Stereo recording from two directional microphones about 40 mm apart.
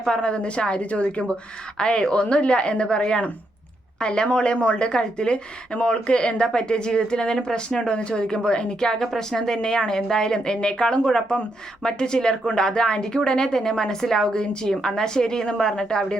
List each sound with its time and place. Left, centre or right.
0.1 s speech: left
4.6 s speech: left
4.9 s a woman's voice: left